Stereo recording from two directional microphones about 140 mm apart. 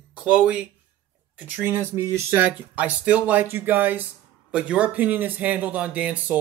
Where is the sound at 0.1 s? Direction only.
5° right (ahead or behind).